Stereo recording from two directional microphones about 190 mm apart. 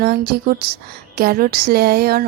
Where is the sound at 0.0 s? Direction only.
55° right (ahead or behind).